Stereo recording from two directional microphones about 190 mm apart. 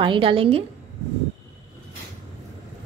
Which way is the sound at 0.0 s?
25° right (ahead or behind).